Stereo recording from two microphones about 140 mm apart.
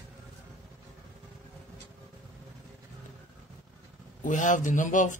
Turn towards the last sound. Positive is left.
turn(degrees=65)  # may be behind; listen again after turning